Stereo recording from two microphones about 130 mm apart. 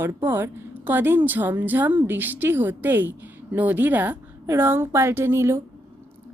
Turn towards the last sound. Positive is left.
turn(degrees=-20)  # may be behind; listen again after turning